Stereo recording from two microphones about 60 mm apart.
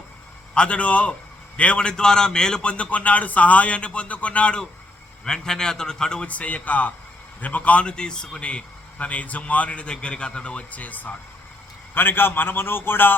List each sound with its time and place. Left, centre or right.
0.5 s a man's voice: centre
11.9 s a man's voice: left